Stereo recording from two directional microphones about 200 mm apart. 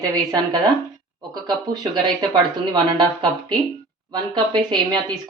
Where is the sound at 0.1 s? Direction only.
20° right (ahead or behind).